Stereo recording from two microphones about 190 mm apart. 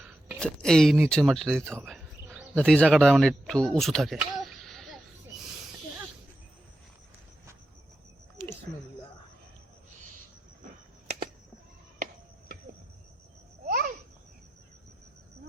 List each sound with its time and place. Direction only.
0.3 s speech: 5° left (ahead or behind)
1.8 s cricket: 5° right (ahead or behind)
2.6 s speech: 5° left (ahead or behind)
13.7 s a sound: 50° right (ahead or behind)